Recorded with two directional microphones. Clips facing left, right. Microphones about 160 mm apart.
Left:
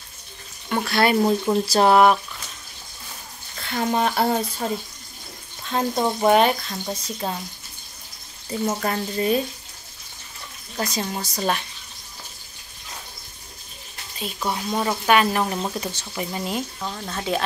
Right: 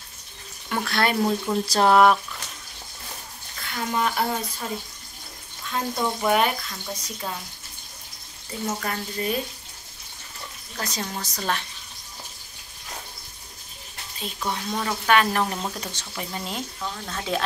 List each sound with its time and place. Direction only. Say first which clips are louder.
0.7 s speech: left 4 dB; 5° left (ahead or behind)
3.6 s speech: left 4 dB; 30° left (ahead or behind)
8.6 s speech: left 4 dB; 30° left (ahead or behind)
10.8 s speech: left 5 dB; 10° left (ahead or behind)
14.2 s speech: left 3 dB; 10° left (ahead or behind)